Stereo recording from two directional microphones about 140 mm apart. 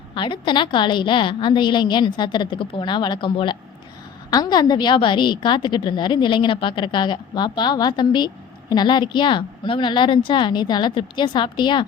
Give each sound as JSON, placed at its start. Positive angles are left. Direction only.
{"t": 0.1, "sound": "a woman's voice", "side_deg": 35}